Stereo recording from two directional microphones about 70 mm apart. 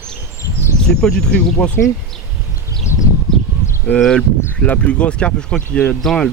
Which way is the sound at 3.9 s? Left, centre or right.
Centre.